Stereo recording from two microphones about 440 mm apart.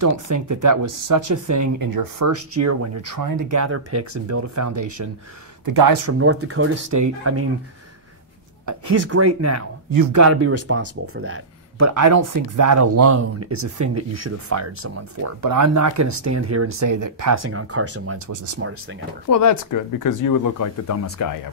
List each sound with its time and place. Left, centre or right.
0.0 s speech: right
5.7 s speech: right
6.0 s speech: right
8.6 s speech: right
18.3 s speech: right
18.6 s speech: right
19.2 s speech: left